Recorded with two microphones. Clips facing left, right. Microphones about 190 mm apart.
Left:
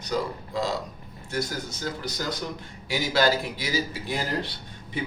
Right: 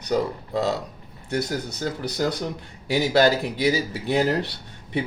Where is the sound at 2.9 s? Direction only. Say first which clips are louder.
Right 5 dB; 60° right (ahead or behind).